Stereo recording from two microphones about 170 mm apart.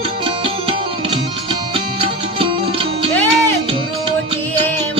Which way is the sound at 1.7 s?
30° right (ahead or behind).